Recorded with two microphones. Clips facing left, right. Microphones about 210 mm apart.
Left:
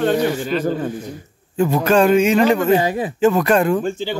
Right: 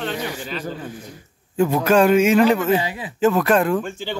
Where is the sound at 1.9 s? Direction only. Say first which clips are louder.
Left 1 dB; 5° right (ahead or behind).